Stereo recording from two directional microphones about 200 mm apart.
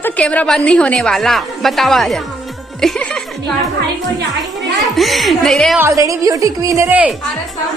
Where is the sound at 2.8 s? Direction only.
Centre (ahead or behind).